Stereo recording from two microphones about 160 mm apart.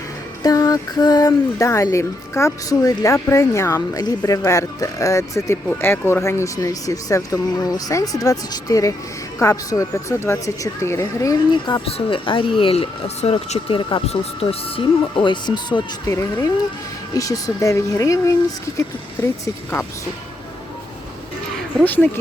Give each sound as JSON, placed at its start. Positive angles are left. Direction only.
{"t": 0.4, "sound": "speech", "side_deg": 25}
{"t": 21.8, "sound": "speech", "side_deg": 10}